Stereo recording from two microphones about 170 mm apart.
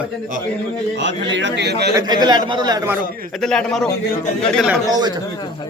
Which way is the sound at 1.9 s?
25° right (ahead or behind).